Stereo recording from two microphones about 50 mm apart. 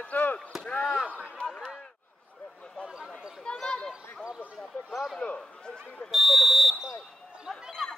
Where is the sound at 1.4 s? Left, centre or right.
Centre.